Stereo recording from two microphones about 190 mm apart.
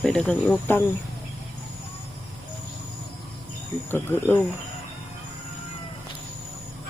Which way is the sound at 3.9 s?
10° left (ahead or behind).